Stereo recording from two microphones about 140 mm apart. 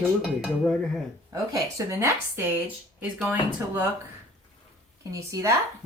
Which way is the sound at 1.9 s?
20° right (ahead or behind).